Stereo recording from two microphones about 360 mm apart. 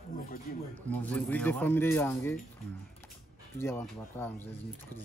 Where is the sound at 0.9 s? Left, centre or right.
Centre.